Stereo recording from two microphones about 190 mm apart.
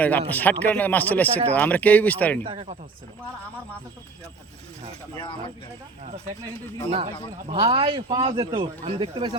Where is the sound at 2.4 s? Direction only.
30° right (ahead or behind).